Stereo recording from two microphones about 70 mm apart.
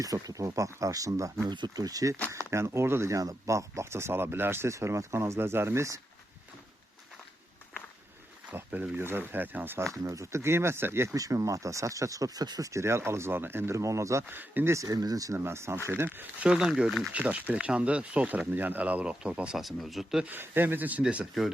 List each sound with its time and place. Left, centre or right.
0.0 s speech: right
1.5 s speech: right
2.5 s speech: right
8.4 s speech: right
9.8 s speech: right
11.1 s speech: right
12.8 s speech: right
14.3 s speech: right
14.8 s speech: right
15.4 s speech: right
16.4 s speech: centre
19.5 s speech: centre
20.2 s speech: right